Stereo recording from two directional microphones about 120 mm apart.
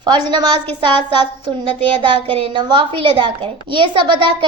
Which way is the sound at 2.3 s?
45° right (ahead or behind).